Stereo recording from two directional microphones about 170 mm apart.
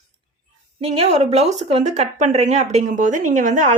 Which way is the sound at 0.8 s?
35° right (ahead or behind).